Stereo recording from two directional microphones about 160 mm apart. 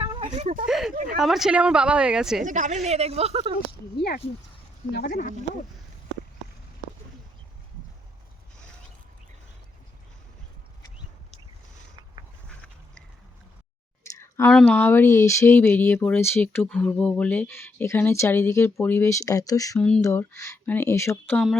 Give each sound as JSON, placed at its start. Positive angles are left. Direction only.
{"t": 0.0, "sound": "a sound", "side_deg": -35}
{"t": 0.7, "sound": "speech", "side_deg": 0}
{"t": 2.4, "sound": "a woman's voice", "side_deg": -50}
{"t": 3.9, "sound": "speech", "side_deg": 85}
{"t": 14.2, "sound": "a sound", "side_deg": 15}
{"t": 14.5, "sound": "speech", "side_deg": 10}